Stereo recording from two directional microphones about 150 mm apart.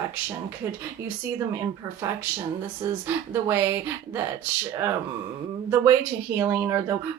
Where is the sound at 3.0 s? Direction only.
15° right (ahead or behind).